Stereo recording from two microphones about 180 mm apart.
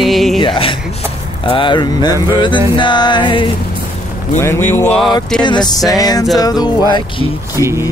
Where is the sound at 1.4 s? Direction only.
25° left (ahead or behind).